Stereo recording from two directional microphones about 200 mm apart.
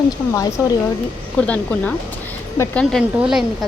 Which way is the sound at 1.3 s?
5° left (ahead or behind).